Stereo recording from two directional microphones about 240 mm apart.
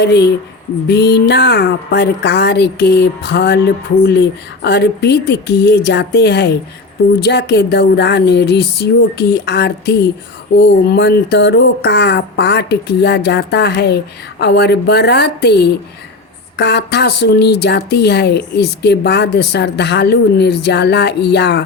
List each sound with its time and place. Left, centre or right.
0.0 s speech: left